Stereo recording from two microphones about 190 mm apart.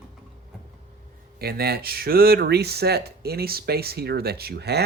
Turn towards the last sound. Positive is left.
turn(degrees=-60)  # may be behind; listen again after turning